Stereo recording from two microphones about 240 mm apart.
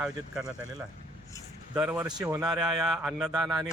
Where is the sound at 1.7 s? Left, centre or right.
Centre.